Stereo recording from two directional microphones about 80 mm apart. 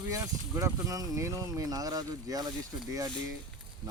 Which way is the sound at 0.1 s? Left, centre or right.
Right.